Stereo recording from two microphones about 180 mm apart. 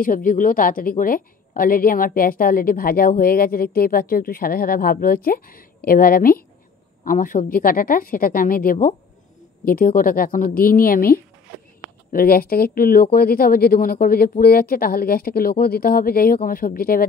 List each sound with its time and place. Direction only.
0.0 s a woman's voice: 50° left (ahead or behind)